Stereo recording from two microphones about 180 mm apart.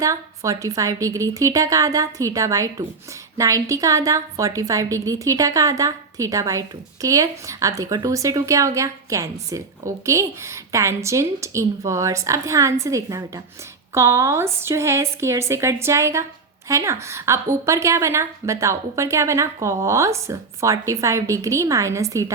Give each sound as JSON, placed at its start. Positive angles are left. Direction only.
{"t": 0.0, "sound": "a woman's voice", "side_deg": -20}